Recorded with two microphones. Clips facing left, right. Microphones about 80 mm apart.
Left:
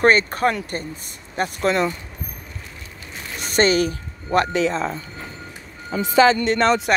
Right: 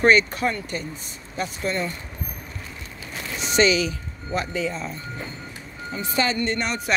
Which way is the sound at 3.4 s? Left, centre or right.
Left.